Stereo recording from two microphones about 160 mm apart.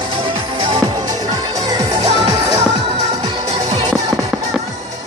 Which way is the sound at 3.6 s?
45° right (ahead or behind).